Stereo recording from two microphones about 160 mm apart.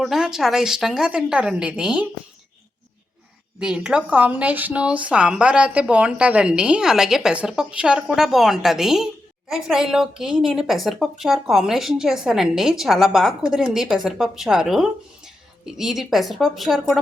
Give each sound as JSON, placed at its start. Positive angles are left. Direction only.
{"t": 0.0, "sound": "a woman's voice", "side_deg": 0}
{"t": 3.6, "sound": "a woman's voice", "side_deg": -5}